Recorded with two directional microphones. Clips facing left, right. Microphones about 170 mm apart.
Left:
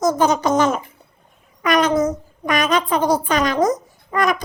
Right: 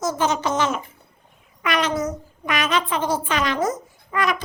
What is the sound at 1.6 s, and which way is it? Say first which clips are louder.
A woman's voice: left 6 dB; 40° left (ahead or behind).